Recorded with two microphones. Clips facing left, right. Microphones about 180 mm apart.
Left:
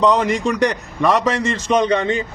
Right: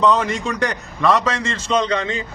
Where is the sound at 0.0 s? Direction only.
15° left (ahead or behind).